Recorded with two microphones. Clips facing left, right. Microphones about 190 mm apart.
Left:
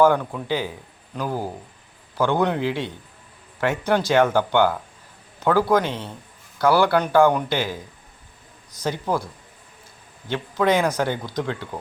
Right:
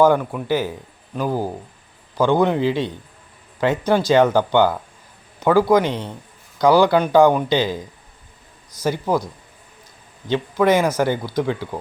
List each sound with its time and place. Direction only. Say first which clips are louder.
0.0 s speech: right 2 dB; 10° right (ahead or behind)
8.8 s speech: right 4 dB; 10° right (ahead or behind)